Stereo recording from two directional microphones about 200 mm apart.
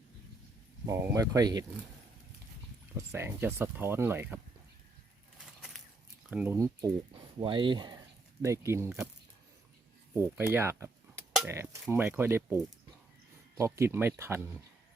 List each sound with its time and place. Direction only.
0.9 s speech: 15° right (ahead or behind)
3.1 s speech: 10° right (ahead or behind)
6.3 s speech: 10° right (ahead or behind)
7.3 s speech: 25° right (ahead or behind)
10.2 s speech: 10° right (ahead or behind)
13.6 s speech: 15° right (ahead or behind)